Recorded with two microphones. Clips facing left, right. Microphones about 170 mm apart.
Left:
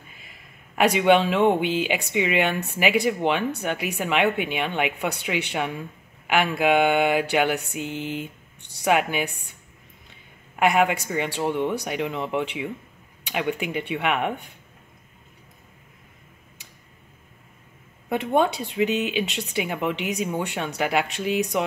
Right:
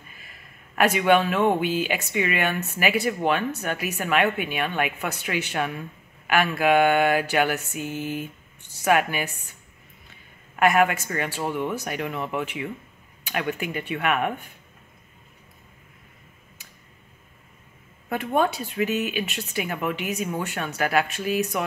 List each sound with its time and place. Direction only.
0.7 s speech: 15° left (ahead or behind)
10.5 s speech: 15° left (ahead or behind)
18.1 s speech: 20° left (ahead or behind)